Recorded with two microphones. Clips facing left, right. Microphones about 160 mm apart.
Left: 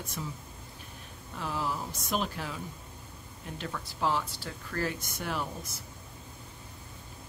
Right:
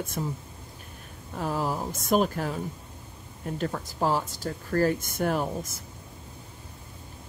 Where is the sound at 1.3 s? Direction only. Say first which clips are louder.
Right 5 dB; 45° right (ahead or behind).